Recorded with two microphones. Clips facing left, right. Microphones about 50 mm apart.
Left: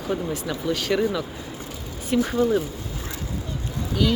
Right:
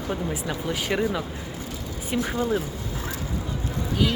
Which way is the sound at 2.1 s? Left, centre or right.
Centre.